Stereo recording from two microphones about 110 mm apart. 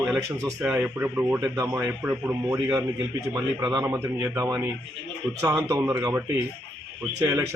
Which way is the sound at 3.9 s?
20° right (ahead or behind).